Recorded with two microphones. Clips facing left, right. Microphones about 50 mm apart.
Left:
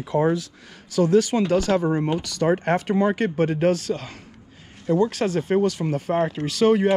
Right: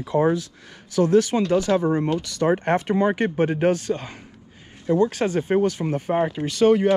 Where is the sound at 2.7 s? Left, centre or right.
Right.